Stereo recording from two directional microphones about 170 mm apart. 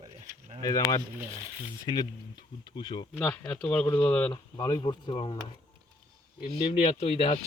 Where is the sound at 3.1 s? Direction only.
10° left (ahead or behind); by 5.3 s 30° left (ahead or behind).